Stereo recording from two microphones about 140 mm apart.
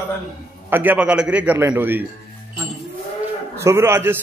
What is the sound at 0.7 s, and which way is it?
A man's voice, 10° right (ahead or behind).